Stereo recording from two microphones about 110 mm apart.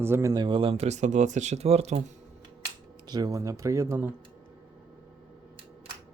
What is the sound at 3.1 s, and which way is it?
Speech, 40° right (ahead or behind).